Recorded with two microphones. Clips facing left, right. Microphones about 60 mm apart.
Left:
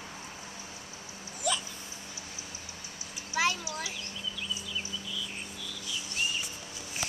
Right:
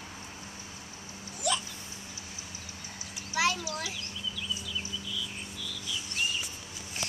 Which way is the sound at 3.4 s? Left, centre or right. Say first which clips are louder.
Right 1 dB; centre.